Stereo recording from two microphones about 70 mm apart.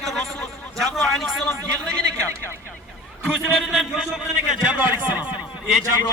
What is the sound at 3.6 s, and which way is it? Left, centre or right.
Speech, centre.